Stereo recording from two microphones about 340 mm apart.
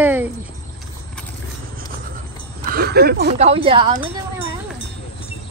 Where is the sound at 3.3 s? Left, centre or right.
Centre.